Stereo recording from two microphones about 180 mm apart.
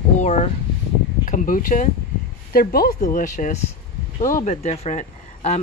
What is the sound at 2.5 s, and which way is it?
Speech, 55° left (ahead or behind).